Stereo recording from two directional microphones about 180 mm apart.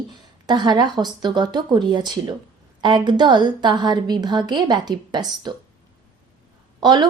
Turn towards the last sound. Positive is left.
turn(degrees=-25)  # may be behind; listen again after turning